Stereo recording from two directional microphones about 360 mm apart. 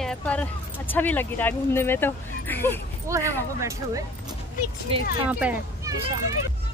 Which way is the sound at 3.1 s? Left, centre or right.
Centre.